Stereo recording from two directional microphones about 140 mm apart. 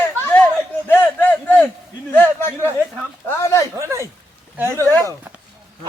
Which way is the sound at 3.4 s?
20° left (ahead or behind).